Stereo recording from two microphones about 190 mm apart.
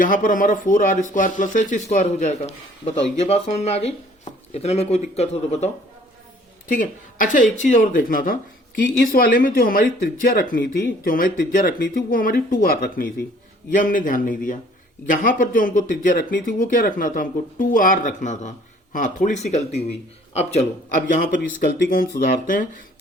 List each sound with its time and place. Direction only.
0.0 s speech: 45° left (ahead or behind)
21.1 s speech: 45° left (ahead or behind)